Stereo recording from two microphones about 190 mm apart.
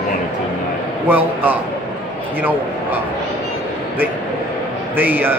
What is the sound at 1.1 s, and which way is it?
A man's voice, 10° right (ahead or behind).